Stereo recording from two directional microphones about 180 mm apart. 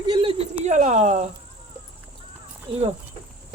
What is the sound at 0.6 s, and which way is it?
Speech, 40° right (ahead or behind).